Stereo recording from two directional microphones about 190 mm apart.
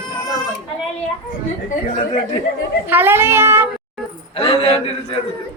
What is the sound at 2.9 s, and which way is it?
Child singing, 10° right (ahead or behind).